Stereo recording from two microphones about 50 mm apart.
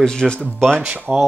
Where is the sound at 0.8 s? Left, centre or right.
Right.